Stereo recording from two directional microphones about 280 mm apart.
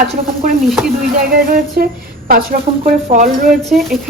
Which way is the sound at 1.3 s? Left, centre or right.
Right.